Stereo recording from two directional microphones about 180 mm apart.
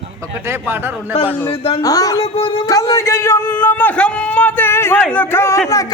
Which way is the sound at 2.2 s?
30° left (ahead or behind).